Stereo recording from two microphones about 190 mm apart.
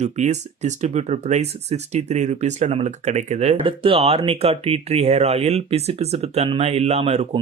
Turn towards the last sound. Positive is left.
turn(degrees=-30)  # may be behind; listen again after turning